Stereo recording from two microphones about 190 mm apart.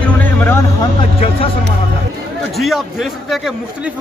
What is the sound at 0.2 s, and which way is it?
Vehicle, 10° left (ahead or behind).